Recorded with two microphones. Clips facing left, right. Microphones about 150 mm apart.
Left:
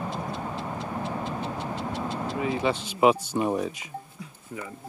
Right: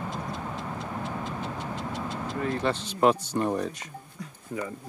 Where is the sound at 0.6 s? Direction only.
30° left (ahead or behind).